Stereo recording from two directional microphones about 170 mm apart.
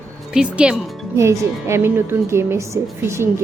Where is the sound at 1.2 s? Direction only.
15° right (ahead or behind).